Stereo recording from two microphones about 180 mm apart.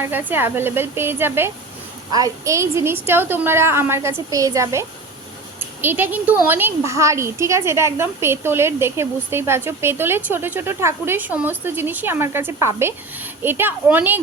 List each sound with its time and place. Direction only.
0.0 s speech: 10° right (ahead or behind)